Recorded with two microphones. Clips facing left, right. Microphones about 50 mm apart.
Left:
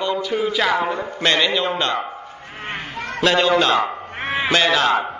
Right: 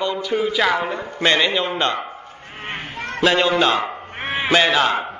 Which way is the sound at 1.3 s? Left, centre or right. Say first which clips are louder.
Even; right.